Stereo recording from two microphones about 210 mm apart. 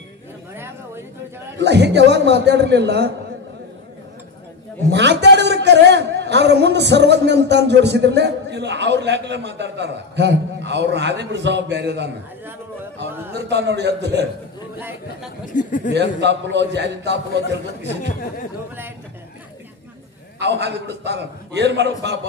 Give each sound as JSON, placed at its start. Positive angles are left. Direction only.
{"t": 1.6, "sound": "a man's voice", "side_deg": -55}
{"t": 4.9, "sound": "a man's voice", "side_deg": -55}
{"t": 13.3, "sound": "a man's voice", "side_deg": -55}
{"t": 15.5, "sound": "speech", "side_deg": 40}
{"t": 16.2, "sound": "a man's voice", "side_deg": -55}
{"t": 20.3, "sound": "a man's voice", "side_deg": -55}